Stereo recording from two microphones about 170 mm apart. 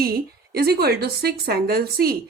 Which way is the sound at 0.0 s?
65° right (ahead or behind).